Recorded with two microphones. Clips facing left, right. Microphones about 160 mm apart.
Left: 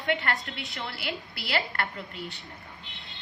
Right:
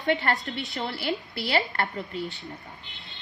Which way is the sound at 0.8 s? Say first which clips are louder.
Right 5 dB; 25° right (ahead or behind).